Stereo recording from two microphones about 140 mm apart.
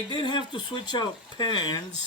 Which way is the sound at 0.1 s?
35° left (ahead or behind).